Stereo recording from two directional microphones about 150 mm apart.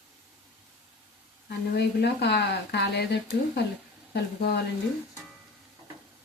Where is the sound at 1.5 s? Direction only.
90° left.